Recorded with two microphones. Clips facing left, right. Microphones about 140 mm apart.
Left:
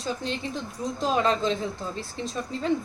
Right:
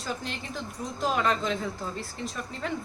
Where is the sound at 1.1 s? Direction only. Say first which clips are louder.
Left 3 dB; 25° left (ahead or behind).